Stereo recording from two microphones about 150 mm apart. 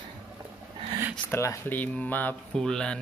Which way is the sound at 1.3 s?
20° left (ahead or behind).